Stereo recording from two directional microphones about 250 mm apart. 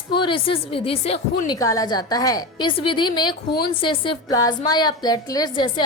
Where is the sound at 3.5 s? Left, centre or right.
Left.